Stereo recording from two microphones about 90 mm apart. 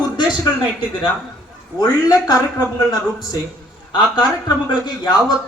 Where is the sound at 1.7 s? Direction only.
45° left (ahead or behind).